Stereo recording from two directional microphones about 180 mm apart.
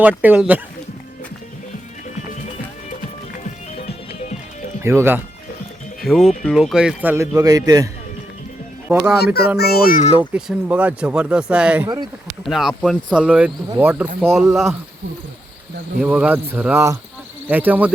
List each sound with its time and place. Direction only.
0.0 s speech: 10° right (ahead or behind)
3.8 s music: 35° left (ahead or behind)
4.8 s speech: 15° right (ahead or behind)
6.0 s speech: centre (ahead or behind); by 7.9 s 20° right (ahead or behind)
8.9 s speech: 5° right (ahead or behind)
9.1 s a child's voice: 60° left (ahead or behind)
10.0 s speech: 35° left (ahead or behind)
10.3 s speech: 10° right (ahead or behind)
16.0 s speech: 10° right (ahead or behind)